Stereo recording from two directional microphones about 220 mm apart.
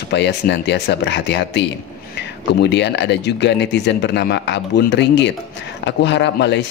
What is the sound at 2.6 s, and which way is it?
Speech, 50° left (ahead or behind).